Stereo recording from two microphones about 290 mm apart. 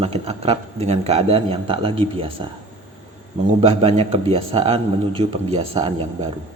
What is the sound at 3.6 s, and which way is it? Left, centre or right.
A man's voice, right.